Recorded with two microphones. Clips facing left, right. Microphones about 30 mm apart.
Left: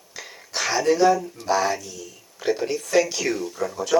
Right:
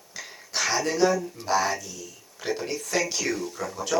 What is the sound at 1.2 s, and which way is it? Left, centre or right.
Speech, centre.